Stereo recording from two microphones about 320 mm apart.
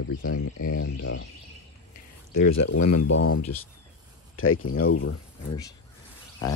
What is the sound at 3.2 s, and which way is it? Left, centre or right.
Speech, left.